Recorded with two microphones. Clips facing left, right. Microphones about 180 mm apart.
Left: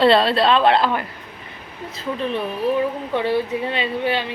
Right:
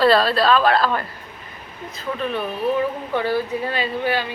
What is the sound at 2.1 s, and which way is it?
A woman's voice, 30° left (ahead or behind).